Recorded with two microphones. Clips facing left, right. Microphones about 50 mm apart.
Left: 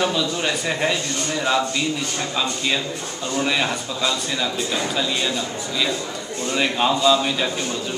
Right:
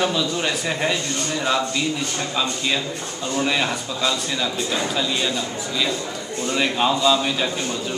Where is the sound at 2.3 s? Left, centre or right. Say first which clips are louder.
Even; centre.